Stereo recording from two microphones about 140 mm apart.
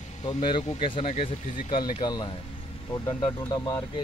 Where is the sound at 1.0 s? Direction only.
55° left (ahead or behind).